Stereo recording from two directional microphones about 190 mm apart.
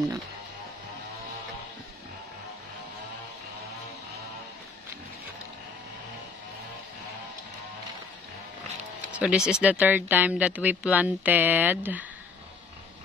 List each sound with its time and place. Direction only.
9.1 s speech: 5° right (ahead or behind)